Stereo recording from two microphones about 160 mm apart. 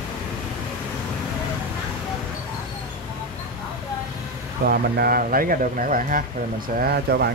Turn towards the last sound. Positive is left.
turn(degrees=-75)  # may be behind; listen again after turning